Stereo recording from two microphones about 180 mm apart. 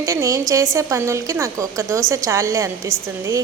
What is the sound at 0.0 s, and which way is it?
A woman's voice, 15° right (ahead or behind).